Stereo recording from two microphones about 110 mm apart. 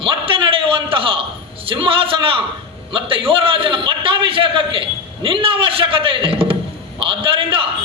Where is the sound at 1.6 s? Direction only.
55° right (ahead or behind).